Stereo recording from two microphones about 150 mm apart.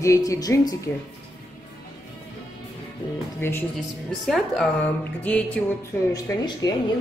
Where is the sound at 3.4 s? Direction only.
15° left (ahead or behind).